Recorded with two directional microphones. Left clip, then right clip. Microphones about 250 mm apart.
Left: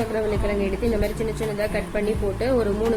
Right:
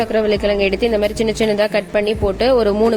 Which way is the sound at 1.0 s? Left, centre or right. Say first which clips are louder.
Right 9 dB; right.